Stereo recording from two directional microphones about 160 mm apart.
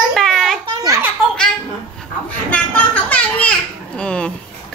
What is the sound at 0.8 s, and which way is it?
Speech, 20° right (ahead or behind).